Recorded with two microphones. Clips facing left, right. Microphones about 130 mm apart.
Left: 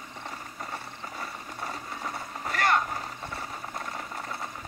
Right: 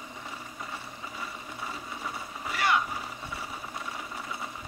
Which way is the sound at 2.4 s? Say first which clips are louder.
Left 2 dB; 50° left (ahead or behind).